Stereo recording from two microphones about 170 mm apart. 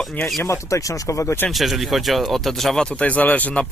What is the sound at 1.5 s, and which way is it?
Speech, centre (ahead or behind).